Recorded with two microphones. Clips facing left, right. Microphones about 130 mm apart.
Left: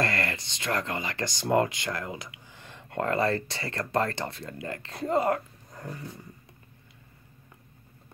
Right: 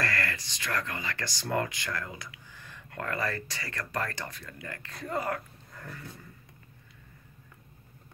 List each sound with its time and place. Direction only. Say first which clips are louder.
0.0 s speech: left 4 dB; 25° left (ahead or behind)